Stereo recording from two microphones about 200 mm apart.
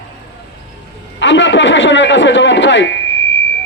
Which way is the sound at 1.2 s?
65° left (ahead or behind).